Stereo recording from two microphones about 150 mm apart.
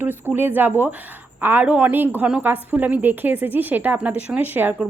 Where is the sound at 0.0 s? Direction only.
15° right (ahead or behind).